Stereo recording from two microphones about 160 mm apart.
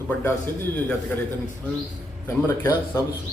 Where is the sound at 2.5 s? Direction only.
15° left (ahead or behind).